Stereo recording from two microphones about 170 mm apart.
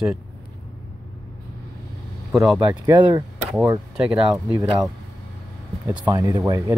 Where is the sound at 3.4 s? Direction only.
10° right (ahead or behind).